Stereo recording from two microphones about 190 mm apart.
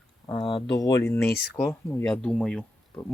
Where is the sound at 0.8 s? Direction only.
20° left (ahead or behind).